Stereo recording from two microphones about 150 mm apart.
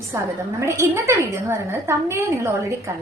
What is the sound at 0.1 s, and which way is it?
A woman's voice, 15° right (ahead or behind).